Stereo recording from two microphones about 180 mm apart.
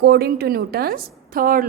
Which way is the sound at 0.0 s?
60° right (ahead or behind).